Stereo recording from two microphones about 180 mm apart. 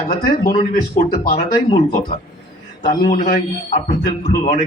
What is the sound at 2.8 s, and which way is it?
Speech, 25° left (ahead or behind).